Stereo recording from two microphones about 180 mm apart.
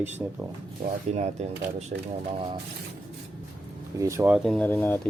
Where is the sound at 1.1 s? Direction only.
40° right (ahead or behind).